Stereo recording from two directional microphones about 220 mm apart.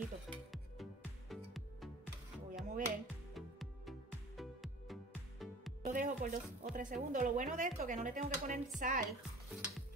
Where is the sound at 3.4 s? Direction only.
Centre (ahead or behind).